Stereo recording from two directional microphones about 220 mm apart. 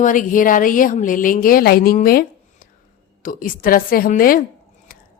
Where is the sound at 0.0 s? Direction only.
35° left (ahead or behind).